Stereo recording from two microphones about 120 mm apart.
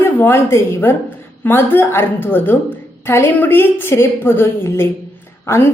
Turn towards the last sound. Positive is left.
turn(degrees=20)  # may be behind; listen again after turning